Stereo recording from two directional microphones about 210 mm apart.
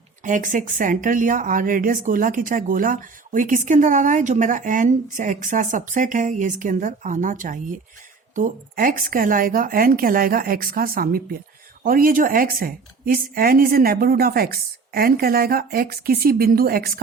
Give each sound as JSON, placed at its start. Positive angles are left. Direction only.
{"t": 0.3, "sound": "a woman's voice", "side_deg": -40}